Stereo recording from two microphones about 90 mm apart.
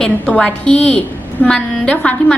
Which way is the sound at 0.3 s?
15° left (ahead or behind).